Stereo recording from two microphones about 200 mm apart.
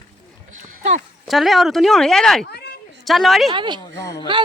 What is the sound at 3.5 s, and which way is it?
Speech, 25° right (ahead or behind).